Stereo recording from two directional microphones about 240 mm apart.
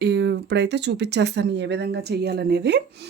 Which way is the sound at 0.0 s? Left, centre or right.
Right.